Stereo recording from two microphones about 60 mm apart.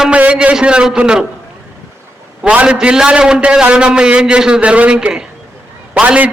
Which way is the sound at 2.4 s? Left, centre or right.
Right.